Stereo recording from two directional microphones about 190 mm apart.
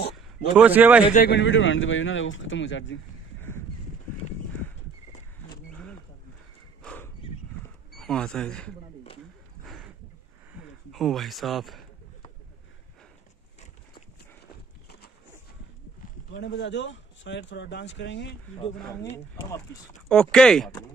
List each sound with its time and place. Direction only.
0.6 s speech: 10° right (ahead or behind)
1.1 s speech: 50° left (ahead or behind)
1.4 s speech: 90° left
3.3 s a sound: 15° left (ahead or behind)
6.8 s a sound: 5° left (ahead or behind)
7.9 s speech: 5° left (ahead or behind)
9.7 s a sound: centre (ahead or behind)
10.5 s speech: centre (ahead or behind)
16.3 s speech: 65° left (ahead or behind)
20.1 s speech: 5° left (ahead or behind)